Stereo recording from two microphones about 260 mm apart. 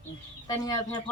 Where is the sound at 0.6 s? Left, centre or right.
Centre.